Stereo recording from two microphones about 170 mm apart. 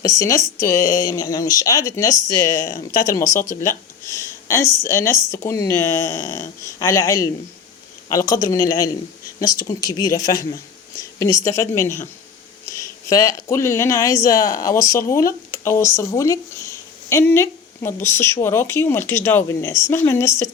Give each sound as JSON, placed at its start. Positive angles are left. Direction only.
{"t": 0.0, "sound": "speech", "side_deg": 20}
{"t": 3.3, "sound": "speech", "side_deg": 50}
{"t": 3.6, "sound": "speech", "side_deg": 20}